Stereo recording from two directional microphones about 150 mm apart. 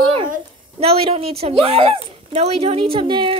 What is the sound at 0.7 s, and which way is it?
Speech, 40° right (ahead or behind).